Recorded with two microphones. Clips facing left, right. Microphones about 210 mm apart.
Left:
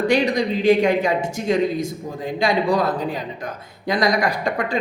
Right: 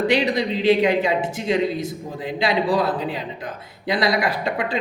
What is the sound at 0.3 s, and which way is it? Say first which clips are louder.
A man's voice: left 1 dB; 45° left (ahead or behind).